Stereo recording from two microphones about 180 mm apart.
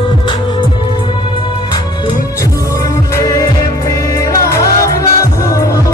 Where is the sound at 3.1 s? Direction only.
20° left (ahead or behind).